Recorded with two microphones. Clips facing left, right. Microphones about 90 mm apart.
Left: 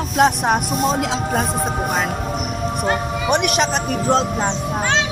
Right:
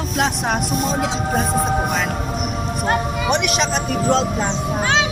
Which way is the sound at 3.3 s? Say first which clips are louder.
Left 2 dB; 45° left (ahead or behind).